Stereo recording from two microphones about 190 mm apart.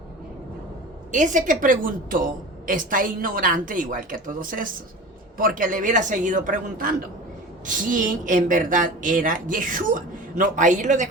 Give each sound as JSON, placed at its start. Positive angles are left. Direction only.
{"t": 1.1, "sound": "a woman's voice", "side_deg": -40}